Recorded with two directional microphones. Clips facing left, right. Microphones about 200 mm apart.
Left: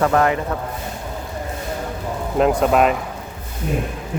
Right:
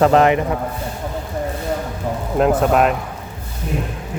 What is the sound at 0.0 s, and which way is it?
Speech, 20° right (ahead or behind).